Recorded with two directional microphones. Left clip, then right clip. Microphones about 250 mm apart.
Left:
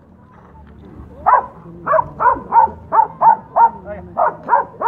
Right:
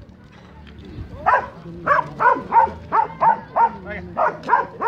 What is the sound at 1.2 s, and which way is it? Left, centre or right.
Dog, right.